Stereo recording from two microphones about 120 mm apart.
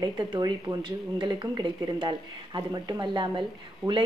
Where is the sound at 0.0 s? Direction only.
35° right (ahead or behind).